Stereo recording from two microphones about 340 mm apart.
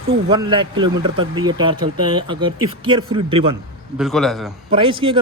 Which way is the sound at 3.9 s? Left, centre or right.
Centre.